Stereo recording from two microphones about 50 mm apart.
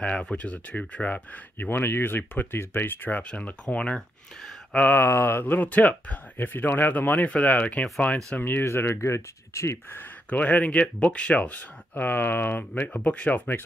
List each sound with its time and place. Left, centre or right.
0.0 s speech: centre
1.6 s speech: left
3.1 s speech: left
4.9 s speech: left
8.4 s speech: left
8.6 s speech: left
8.9 s speech: left
10.3 s speech: left